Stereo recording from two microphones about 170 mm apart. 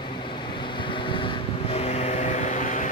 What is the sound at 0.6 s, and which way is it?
Vehicle, 30° left (ahead or behind).